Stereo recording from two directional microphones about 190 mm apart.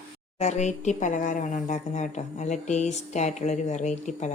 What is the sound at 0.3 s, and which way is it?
Speech, 35° left (ahead or behind).